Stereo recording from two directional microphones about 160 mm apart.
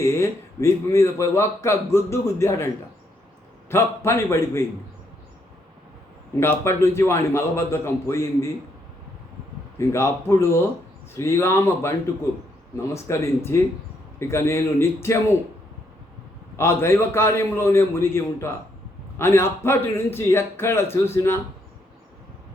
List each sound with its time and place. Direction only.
0.0 s speech: 15° left (ahead or behind)
3.7 s speech: 15° left (ahead or behind)
6.4 s speech: 15° left (ahead or behind)
9.7 s speech: 15° left (ahead or behind)
16.6 s speech: 15° left (ahead or behind)